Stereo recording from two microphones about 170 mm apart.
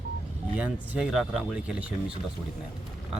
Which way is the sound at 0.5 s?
5° right (ahead or behind).